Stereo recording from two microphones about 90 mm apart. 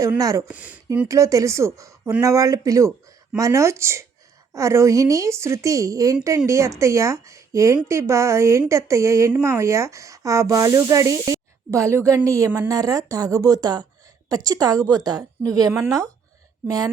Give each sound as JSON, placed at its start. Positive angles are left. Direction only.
{"t": 0.2, "sound": "speech", "side_deg": -40}
{"t": 0.5, "sound": "speech", "side_deg": -15}
{"t": 1.0, "sound": "a woman's voice", "side_deg": -35}